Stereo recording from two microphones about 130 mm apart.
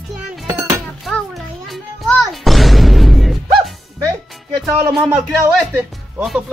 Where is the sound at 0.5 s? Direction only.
25° right (ahead or behind).